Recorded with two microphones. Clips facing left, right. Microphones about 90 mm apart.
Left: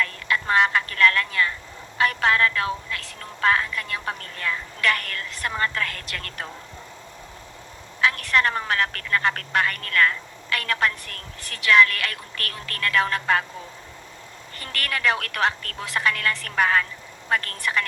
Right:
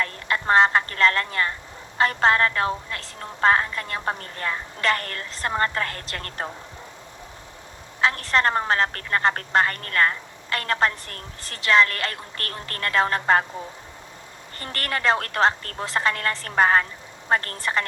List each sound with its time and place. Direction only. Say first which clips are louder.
0.0 s a woman's voice: even; 35° right (ahead or behind)
8.0 s a woman's voice: right 1 dB; 30° right (ahead or behind)
14.6 s a woman's voice: even; 35° right (ahead or behind)